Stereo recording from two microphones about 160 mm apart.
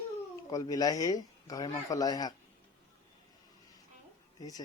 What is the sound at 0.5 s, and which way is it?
Speech, 20° left (ahead or behind).